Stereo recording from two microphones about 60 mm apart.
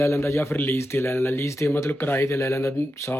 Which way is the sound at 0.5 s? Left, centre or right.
Left.